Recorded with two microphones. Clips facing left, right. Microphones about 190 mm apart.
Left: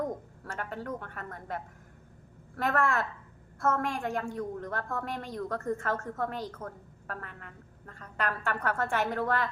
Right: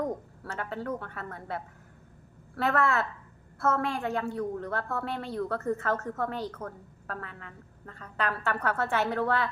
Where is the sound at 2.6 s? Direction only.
15° left (ahead or behind).